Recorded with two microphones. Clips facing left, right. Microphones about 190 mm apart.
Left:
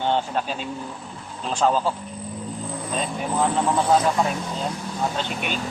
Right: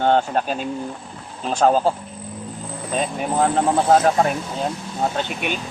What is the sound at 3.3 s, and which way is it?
Speech, 55° right (ahead or behind).